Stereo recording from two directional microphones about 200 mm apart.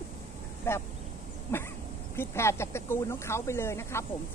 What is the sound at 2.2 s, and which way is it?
Speech, 15° left (ahead or behind).